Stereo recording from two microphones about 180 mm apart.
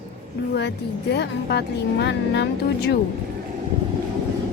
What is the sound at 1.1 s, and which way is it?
Speech, 70° left (ahead or behind).